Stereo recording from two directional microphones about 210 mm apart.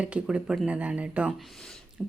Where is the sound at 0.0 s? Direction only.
5° right (ahead or behind).